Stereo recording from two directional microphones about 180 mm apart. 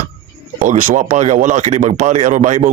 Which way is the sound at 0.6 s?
45° right (ahead or behind).